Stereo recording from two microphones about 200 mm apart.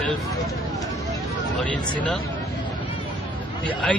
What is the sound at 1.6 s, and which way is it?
Speech, 5° left (ahead or behind).